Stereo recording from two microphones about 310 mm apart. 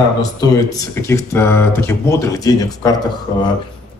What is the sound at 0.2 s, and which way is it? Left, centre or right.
Speech, centre.